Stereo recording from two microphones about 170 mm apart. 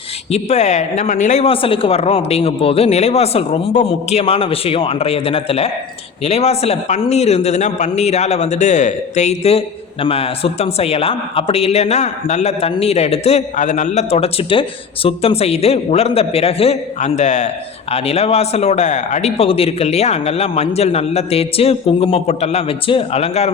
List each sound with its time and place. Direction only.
0.3 s a man's voice: 40° left (ahead or behind)